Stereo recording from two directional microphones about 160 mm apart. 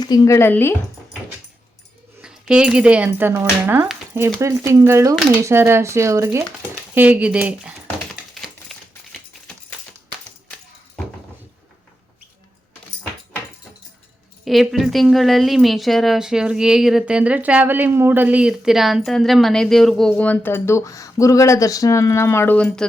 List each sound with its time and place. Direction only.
0.0 s speech: 20° left (ahead or behind)
2.5 s speech: 5° right (ahead or behind)
8.4 s typewriter: centre (ahead or behind)
14.4 s a woman's voice: centre (ahead or behind)